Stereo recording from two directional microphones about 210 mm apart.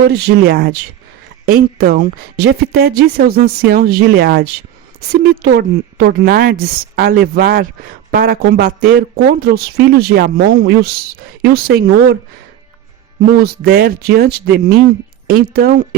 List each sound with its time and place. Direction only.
0.1 s speech: 45° right (ahead or behind)
1.8 s speech: 45° right (ahead or behind)
13.4 s speech: 45° right (ahead or behind)